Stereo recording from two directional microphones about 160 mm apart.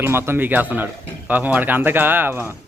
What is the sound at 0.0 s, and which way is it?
Speech, 15° right (ahead or behind).